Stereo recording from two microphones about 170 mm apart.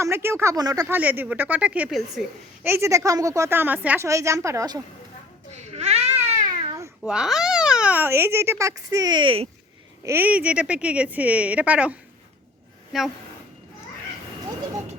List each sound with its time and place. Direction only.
0.0 s a child's voice: 15° right (ahead or behind)
0.9 s a child's voice: 10° right (ahead or behind)
2.6 s a child's voice: 15° right (ahead or behind)
5.7 s baby cry: 40° right (ahead or behind)
7.0 s a child's voice: 5° right (ahead or behind); by 9.5 s 30° right (ahead or behind)
10.0 s a child's voice: 15° right (ahead or behind)